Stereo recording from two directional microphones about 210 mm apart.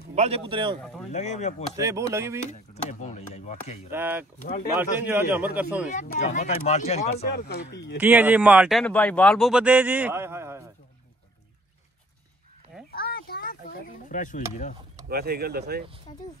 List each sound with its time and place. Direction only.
0.1 s a man's voice: 30° right (ahead or behind)
1.1 s speech: 35° left (ahead or behind)
1.8 s speech: 15° right (ahead or behind)
2.4 s speech: 35° left (ahead or behind)
3.9 s speech: 10° right (ahead or behind)
4.4 s speech: 40° left (ahead or behind)
4.7 s speech: 10° right (ahead or behind)
5.9 s speech: 35° left (ahead or behind)
7.2 s speech: 50° left (ahead or behind)
8.0 s speech: 10° right (ahead or behind)
12.9 s chop: 45° left (ahead or behind)
15.0 s speech: 45° right (ahead or behind)